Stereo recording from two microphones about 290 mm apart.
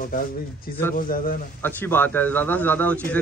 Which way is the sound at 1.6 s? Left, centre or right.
Centre.